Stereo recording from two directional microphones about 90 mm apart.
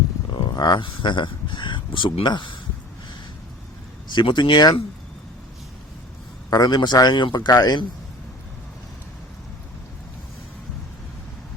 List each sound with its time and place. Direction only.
0.3 s speech: 50° left (ahead or behind)
4.1 s speech: 60° left (ahead or behind)
6.5 s a man's voice: 50° left (ahead or behind)